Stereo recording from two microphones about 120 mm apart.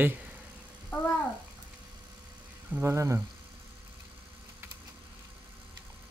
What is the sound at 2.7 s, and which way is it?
Speech, 20° right (ahead or behind).